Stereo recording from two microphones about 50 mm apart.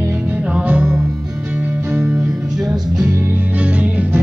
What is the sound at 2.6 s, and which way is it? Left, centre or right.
Music, centre.